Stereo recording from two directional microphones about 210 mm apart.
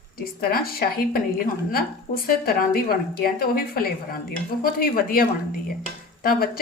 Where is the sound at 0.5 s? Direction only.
45° left (ahead or behind).